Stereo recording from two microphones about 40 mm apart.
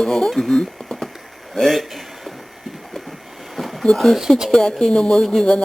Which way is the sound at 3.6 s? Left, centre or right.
Centre.